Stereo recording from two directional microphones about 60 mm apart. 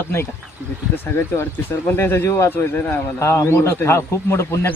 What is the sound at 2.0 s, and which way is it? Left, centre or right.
Speech, left.